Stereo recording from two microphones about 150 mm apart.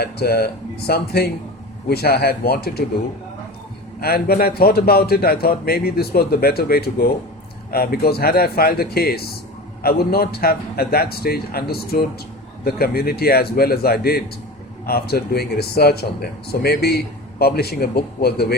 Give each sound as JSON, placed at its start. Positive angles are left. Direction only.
{"t": 0.0, "sound": "a man's voice", "side_deg": 90}
{"t": 4.0, "sound": "a man's voice", "side_deg": 90}